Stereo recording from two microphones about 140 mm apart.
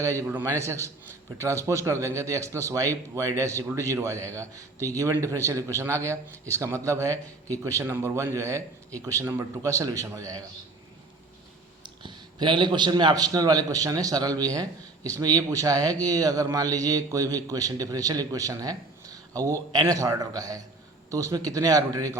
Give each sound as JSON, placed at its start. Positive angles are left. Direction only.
{"t": 0.0, "sound": "a man's voice", "side_deg": -20}
{"t": 11.8, "sound": "a man's voice", "side_deg": -35}